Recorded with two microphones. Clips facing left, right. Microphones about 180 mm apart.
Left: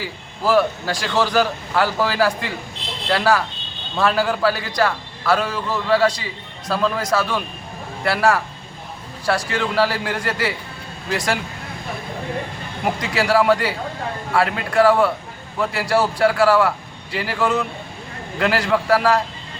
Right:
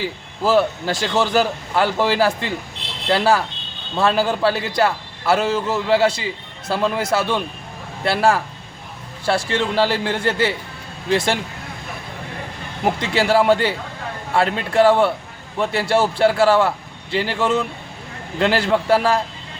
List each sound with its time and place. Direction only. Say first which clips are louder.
0.4 s a man's voice: right 1 dB; 25° right (ahead or behind)
12.8 s a man's voice: right 2 dB; 25° right (ahead or behind)